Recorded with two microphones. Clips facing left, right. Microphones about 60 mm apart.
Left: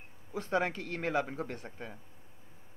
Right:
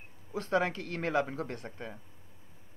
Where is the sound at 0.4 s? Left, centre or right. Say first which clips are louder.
Right 2 dB; centre.